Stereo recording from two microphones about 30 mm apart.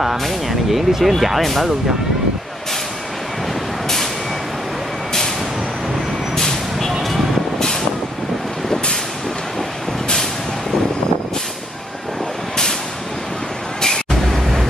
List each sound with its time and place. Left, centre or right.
0.5 s speech: centre
6.3 s vehicle: centre
13.7 s a sound: left